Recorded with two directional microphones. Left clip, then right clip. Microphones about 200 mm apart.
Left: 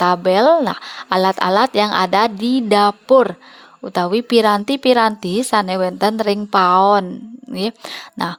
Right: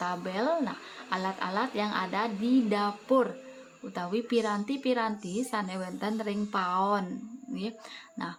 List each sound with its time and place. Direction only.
0.0 s speech: 55° left (ahead or behind)
8.2 s speech: 55° left (ahead or behind)